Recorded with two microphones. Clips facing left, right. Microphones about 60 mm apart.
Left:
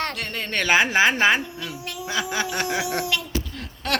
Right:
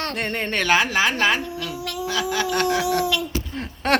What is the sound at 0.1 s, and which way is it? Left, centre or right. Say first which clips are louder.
Speech: right 5 dB; right.